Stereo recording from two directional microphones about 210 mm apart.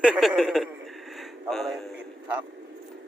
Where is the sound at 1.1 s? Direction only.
Centre (ahead or behind).